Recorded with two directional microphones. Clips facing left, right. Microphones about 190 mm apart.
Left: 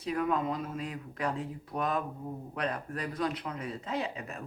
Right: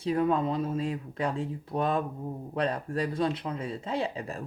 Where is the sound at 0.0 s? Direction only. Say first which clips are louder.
Right 4 dB; 30° right (ahead or behind).